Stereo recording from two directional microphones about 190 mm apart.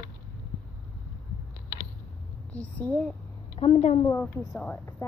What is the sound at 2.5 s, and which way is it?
Speech, 5° left (ahead or behind).